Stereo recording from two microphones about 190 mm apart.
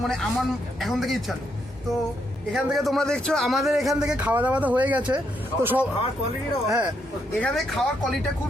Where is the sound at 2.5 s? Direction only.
Centre (ahead or behind).